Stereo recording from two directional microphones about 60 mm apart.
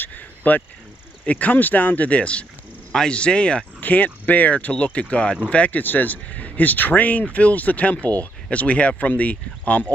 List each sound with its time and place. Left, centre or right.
0.0 s cricket: left
1.2 s speech: left